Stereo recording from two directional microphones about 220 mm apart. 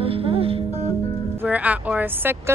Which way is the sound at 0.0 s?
25° right (ahead or behind).